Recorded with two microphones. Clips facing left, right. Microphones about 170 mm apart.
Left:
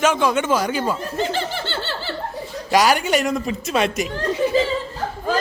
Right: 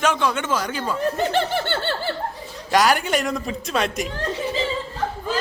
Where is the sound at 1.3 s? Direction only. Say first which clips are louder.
Right 3 dB; 60° right (ahead or behind).